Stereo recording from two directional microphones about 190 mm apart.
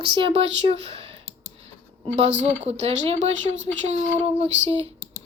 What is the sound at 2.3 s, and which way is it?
Child singing, 35° right (ahead or behind).